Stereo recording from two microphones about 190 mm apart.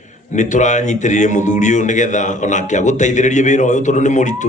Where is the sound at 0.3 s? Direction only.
40° left (ahead or behind).